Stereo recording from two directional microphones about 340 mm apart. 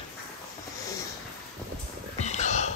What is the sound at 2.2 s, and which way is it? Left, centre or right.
Whispering, centre.